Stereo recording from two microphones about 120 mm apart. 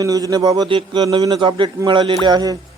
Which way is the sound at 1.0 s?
35° right (ahead or behind).